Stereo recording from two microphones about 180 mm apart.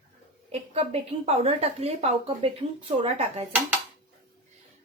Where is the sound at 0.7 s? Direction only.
35° right (ahead or behind).